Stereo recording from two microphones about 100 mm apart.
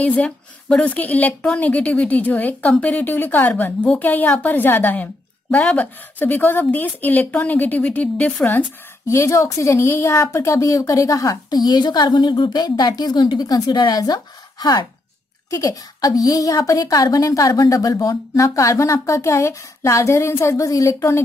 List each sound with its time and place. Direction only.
0.0 s a woman's voice: 10° left (ahead or behind)
9.0 s speech: 30° left (ahead or behind)